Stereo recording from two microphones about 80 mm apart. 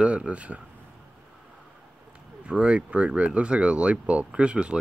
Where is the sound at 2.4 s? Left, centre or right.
Centre.